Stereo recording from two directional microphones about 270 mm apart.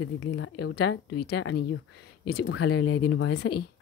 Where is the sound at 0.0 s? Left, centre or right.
Left.